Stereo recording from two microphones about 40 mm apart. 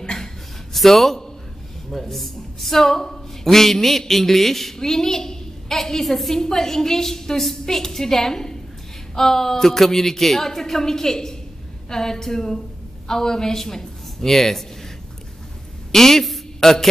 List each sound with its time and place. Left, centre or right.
0.0 s a sound: centre
0.7 s a woman's voice: centre
15.9 s a man's voice: centre